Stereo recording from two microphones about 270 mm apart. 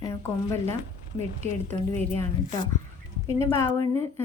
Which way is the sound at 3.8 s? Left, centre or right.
Right.